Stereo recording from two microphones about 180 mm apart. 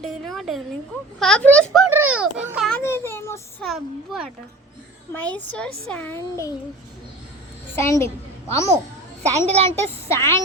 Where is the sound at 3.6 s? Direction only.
Centre (ahead or behind); by 6.5 s 15° left (ahead or behind).